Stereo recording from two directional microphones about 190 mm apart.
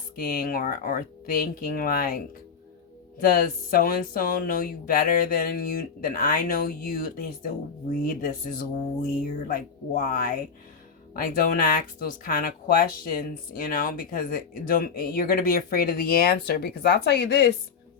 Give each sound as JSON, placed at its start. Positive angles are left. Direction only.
{"t": 0.2, "sound": "speech", "side_deg": 50}
{"t": 3.2, "sound": "speech", "side_deg": 50}